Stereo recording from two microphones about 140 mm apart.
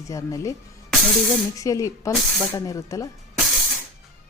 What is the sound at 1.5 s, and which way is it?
A woman's voice, 25° left (ahead or behind).